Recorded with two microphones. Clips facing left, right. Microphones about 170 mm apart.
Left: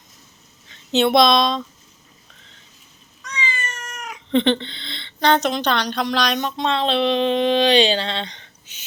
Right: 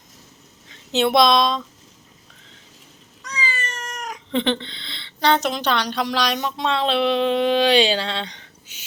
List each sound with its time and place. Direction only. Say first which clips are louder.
0.9 s speech: left 1 dB; 5° right (ahead or behind)
3.2 s cat: even; 35° right (ahead or behind)
4.3 s a woman's voice: left 4 dB; 5° right (ahead or behind)